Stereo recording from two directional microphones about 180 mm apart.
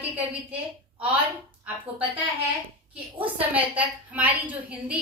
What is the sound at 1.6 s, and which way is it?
A woman's voice, 5° right (ahead or behind).